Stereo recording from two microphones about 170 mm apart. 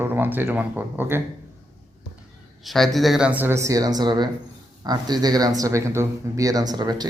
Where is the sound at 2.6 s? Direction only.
Centre (ahead or behind).